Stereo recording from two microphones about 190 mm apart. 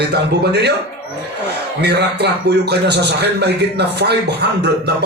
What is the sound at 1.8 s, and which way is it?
A man's voice, 60° right (ahead or behind).